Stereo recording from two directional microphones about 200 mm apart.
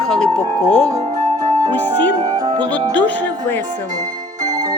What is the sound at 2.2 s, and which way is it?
Music, 20° right (ahead or behind).